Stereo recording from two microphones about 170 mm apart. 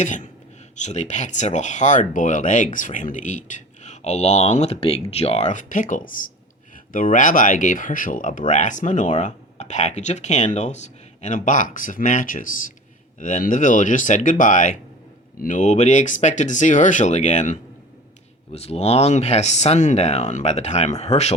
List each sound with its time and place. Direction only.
0.0 s speech: 45° left (ahead or behind)